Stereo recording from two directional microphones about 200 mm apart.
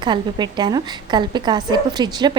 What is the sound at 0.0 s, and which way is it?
A woman's voice, 20° right (ahead or behind).